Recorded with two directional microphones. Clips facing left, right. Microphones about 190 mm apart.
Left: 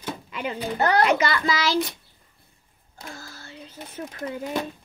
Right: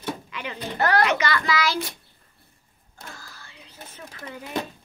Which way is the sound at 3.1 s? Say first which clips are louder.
Left 5 dB; 45° left (ahead or behind).